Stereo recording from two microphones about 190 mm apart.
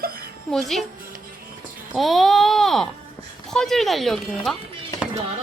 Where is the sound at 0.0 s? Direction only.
55° right (ahead or behind).